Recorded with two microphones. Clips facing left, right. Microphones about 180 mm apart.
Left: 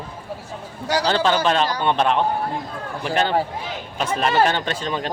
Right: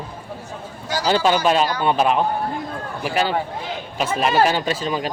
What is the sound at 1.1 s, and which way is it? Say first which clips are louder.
Speech: right 3 dB; 10° right (ahead or behind).